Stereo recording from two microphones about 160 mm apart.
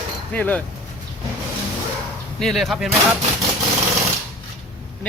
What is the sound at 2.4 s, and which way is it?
Speech, centre (ahead or behind).